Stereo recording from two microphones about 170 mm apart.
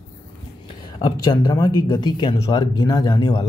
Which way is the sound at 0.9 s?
25° left (ahead or behind).